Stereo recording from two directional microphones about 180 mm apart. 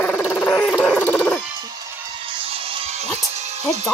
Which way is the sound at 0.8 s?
10° left (ahead or behind).